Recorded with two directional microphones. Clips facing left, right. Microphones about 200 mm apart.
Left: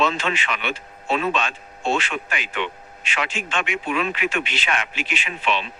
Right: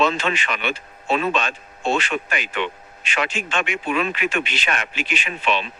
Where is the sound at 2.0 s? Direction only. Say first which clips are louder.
Right 3 dB; 40° right (ahead or behind).